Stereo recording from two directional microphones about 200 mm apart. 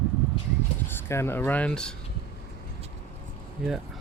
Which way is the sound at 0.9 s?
15° left (ahead or behind).